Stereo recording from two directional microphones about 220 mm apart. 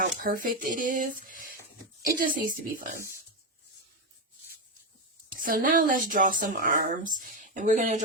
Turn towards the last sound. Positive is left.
turn(degrees=-35)  # may be behind; listen again after turning